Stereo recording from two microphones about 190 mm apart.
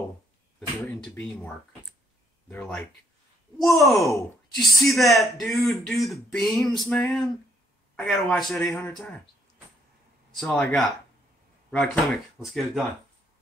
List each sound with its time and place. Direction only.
0.8 s speech: 5° left (ahead or behind)
10.3 s speech: 5° left (ahead or behind)